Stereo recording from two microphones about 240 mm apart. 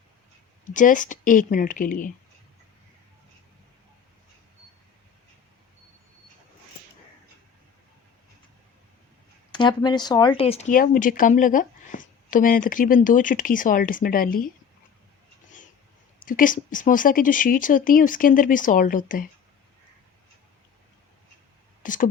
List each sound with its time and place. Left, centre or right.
0.6 s speech: left
9.5 s speech: centre; by 14.5 s left
16.2 s speech: left
21.8 s speech: left